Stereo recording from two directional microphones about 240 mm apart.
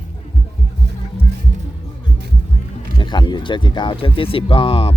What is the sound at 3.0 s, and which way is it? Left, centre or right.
Speech, centre.